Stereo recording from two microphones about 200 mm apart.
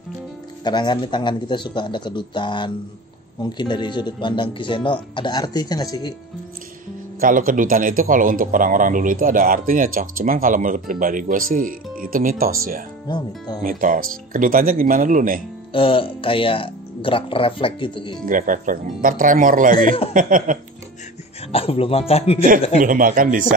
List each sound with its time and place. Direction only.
0.7 s speech: 20° left (ahead or behind)
7.2 s speech: 45° right (ahead or behind)
13.1 s speech: 20° left (ahead or behind)
13.6 s speech: 40° right (ahead or behind)
15.7 s speech: 25° left (ahead or behind)
18.2 s speech: 45° right (ahead or behind)
20.2 s a sound: 40° right (ahead or behind)
21.5 s speech: 30° left (ahead or behind)
22.8 s speech: 40° right (ahead or behind)